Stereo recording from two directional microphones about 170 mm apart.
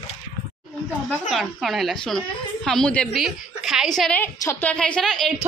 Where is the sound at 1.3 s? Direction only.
Centre (ahead or behind).